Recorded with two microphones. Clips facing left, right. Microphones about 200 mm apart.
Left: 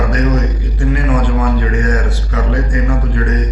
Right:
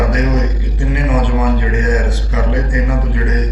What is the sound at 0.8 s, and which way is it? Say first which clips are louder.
Speech: left 1 dB; 20° right (ahead or behind).